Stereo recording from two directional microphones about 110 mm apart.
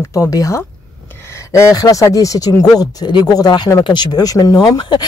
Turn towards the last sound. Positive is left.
turn(degrees=40)  # may be behind; listen again after turning